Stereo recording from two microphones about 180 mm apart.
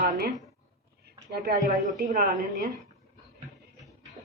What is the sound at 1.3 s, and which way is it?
A woman's voice, 60° right (ahead or behind).